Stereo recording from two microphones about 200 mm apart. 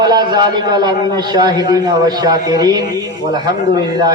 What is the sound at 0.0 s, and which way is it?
A man's voice, 20° right (ahead or behind).